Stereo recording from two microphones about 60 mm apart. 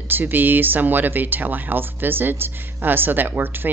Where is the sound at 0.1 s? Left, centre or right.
Right.